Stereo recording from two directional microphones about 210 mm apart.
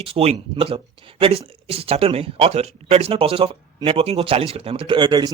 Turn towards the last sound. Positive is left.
turn(degrees=-20)  # may be behind; listen again after turning